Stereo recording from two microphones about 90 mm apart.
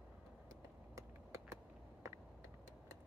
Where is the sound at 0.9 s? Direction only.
35° right (ahead or behind).